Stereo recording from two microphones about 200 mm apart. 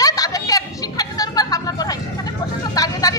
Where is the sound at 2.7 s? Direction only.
20° left (ahead or behind).